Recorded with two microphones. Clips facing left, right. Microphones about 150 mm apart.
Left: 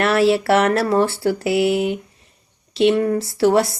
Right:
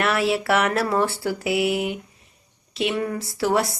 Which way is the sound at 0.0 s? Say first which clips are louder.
Left 6 dB; 30° left (ahead or behind).